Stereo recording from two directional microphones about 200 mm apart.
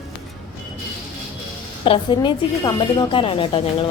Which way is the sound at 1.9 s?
20° left (ahead or behind).